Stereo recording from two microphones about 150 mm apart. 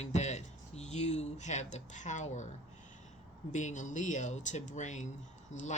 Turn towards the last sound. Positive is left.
turn(degrees=50)  # may be behind; listen again after turning